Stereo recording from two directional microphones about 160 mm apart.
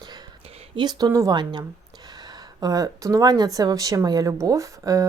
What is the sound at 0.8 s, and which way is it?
Speech, 25° right (ahead or behind).